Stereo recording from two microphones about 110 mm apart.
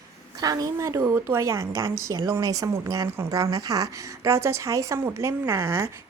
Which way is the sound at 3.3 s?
35° right (ahead or behind).